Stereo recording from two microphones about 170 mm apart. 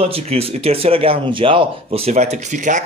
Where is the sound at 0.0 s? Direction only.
35° right (ahead or behind).